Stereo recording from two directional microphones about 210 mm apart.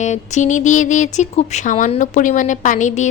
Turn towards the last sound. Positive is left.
turn(degrees=35)  # may be behind; listen again after turning